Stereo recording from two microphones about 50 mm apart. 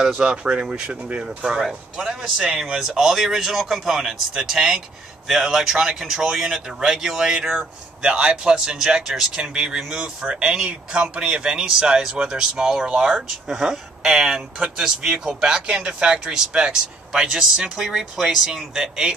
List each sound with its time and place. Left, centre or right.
0.0 s speech: centre